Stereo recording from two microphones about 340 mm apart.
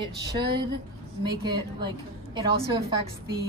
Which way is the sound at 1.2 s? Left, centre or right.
Centre.